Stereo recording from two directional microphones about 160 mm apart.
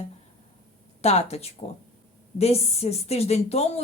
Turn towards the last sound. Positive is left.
turn(degrees=40)  # may be behind; listen again after turning